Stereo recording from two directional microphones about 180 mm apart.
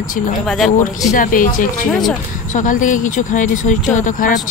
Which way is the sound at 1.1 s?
50° left (ahead or behind).